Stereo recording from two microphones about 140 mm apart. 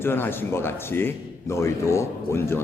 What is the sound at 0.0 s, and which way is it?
Speech, 15° left (ahead or behind).